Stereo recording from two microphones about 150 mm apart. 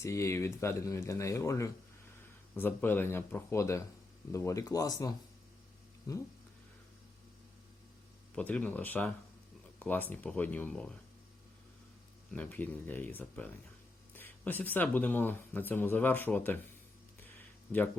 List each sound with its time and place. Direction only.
0.0 s speech: 20° left (ahead or behind)
8.4 s speech: 10° left (ahead or behind)
12.3 s speech: 10° left (ahead or behind)